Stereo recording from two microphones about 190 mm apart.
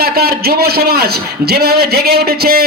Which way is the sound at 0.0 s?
55° right (ahead or behind).